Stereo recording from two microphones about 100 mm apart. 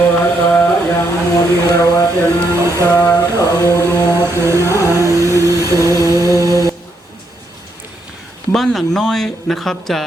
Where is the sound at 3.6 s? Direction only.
30° left (ahead or behind).